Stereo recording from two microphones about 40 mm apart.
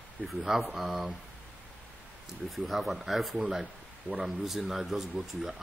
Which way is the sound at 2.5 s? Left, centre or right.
Centre.